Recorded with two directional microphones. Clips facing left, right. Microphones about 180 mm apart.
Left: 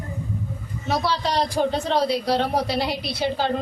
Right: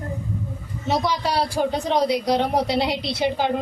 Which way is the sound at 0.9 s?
15° right (ahead or behind).